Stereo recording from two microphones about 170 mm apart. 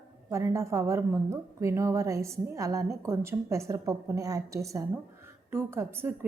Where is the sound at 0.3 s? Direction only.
15° right (ahead or behind).